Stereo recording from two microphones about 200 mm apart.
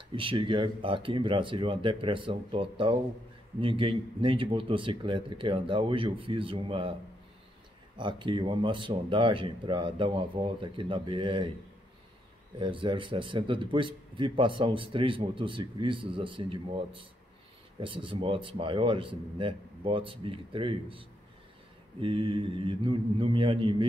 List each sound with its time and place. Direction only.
0.1 s a man's voice: 25° right (ahead or behind)
8.0 s a man's voice: 25° right (ahead or behind)
12.5 s a man's voice: 25° right (ahead or behind)
22.0 s a man's voice: 25° right (ahead or behind)